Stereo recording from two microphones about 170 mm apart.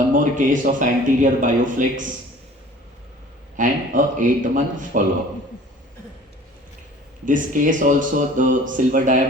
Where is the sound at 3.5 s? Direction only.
50° right (ahead or behind).